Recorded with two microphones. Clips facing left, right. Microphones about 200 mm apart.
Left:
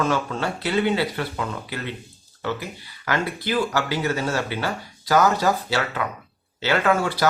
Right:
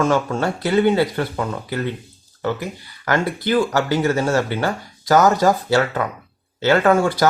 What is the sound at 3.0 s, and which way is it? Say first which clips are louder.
Speech: right 5 dB; 50° right (ahead or behind).